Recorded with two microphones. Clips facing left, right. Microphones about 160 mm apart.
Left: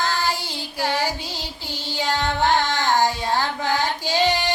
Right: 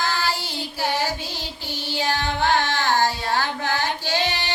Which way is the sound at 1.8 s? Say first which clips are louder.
Even; 15° right (ahead or behind).